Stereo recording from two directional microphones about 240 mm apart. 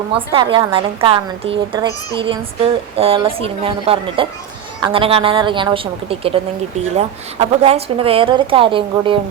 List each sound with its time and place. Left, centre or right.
0.1 s a woman's voice: right